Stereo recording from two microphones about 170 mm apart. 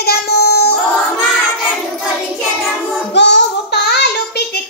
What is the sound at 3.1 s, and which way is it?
Child singing, 85° left.